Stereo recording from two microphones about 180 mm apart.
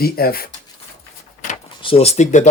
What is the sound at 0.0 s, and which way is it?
Speech, 55° left (ahead or behind).